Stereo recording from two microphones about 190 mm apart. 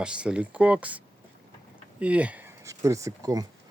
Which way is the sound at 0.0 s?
5° right (ahead or behind).